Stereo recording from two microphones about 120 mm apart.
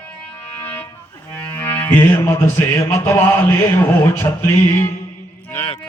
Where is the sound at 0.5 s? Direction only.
15° left (ahead or behind).